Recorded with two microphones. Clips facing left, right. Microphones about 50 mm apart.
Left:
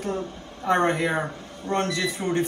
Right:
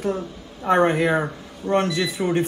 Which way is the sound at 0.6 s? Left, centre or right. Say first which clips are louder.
Right 4 dB; centre.